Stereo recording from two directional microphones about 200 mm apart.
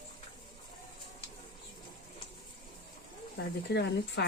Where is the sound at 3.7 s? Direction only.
55° left (ahead or behind).